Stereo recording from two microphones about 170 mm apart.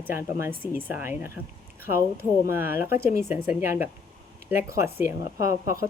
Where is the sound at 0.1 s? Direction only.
15° right (ahead or behind).